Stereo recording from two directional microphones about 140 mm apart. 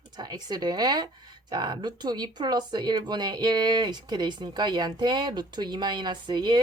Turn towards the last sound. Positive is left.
turn(degrees=-30)  # may be behind; listen again after turning